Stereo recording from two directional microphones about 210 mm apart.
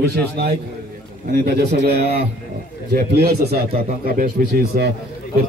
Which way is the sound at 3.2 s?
45° right (ahead or behind).